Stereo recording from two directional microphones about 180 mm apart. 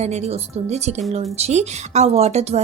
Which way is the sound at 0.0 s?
35° right (ahead or behind).